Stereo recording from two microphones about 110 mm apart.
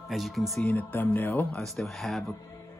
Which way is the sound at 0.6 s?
15° left (ahead or behind).